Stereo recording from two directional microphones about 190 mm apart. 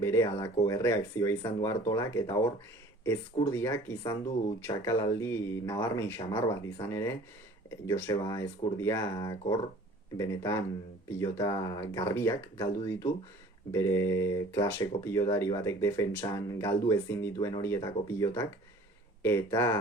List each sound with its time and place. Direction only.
0.0 s speech: 15° left (ahead or behind)